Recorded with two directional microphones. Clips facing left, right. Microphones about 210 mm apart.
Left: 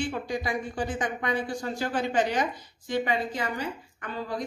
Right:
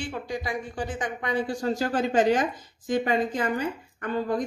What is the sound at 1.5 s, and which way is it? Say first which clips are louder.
A woman's voice: right 4 dB; 40° right (ahead or behind).